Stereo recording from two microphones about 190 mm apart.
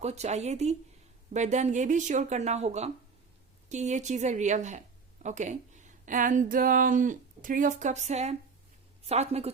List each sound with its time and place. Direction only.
0.0 s a woman's voice: 35° right (ahead or behind)